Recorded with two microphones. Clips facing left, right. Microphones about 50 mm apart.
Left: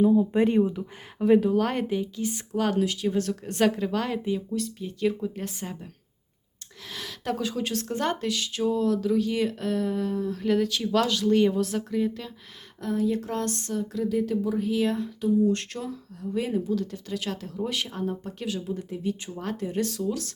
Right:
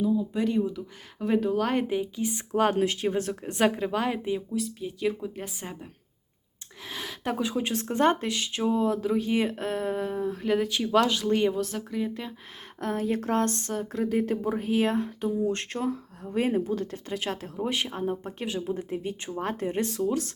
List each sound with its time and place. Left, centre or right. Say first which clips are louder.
0.0 s speech: left 5 dB; left
1.2 s speech: left 4 dB; centre
2.5 s speech: right 2 dB; right
3.6 s a woman's voice: even; centre
11.3 s a woman's voice: left 3 dB; centre
12.8 s speech: left 2 dB; right